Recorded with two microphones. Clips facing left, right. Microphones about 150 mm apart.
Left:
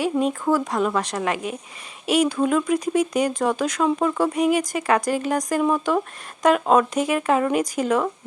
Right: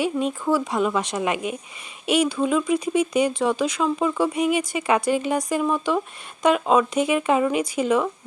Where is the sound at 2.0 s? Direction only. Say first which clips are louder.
Left 1 dB; 40° left (ahead or behind).